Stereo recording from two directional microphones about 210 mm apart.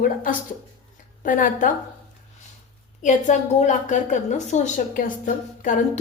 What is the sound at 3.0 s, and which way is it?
A woman's voice, 35° left (ahead or behind).